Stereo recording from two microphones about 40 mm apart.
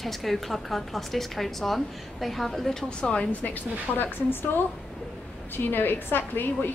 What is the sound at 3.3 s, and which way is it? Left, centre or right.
A woman's voice, left.